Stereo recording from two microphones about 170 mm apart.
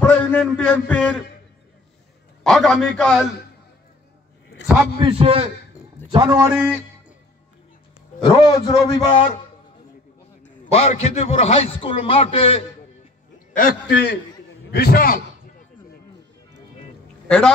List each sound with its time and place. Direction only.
0.0 s a man's voice: 5° left (ahead or behind)
2.4 s a man's voice: centre (ahead or behind)
4.9 s a man's voice: 35° right (ahead or behind)
8.2 s a man's voice: 30° left (ahead or behind)
10.7 s a man's voice: 40° left (ahead or behind)
13.6 s a man's voice: 65° left (ahead or behind)
14.7 s a man's voice: 65° left (ahead or behind)